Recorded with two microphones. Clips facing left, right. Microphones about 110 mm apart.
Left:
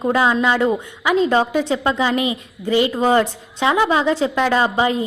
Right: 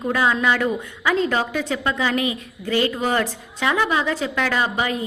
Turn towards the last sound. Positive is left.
turn(degrees=25)  # may be behind; listen again after turning